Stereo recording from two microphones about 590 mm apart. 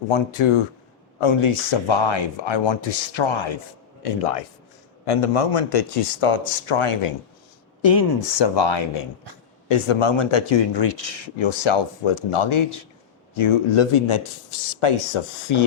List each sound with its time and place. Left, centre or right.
0.1 s speech: left
4.0 s speech: left
8.3 s speech: left